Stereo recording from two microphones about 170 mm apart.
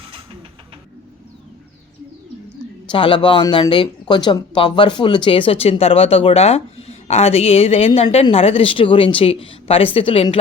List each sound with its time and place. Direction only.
2.9 s speech: 30° left (ahead or behind)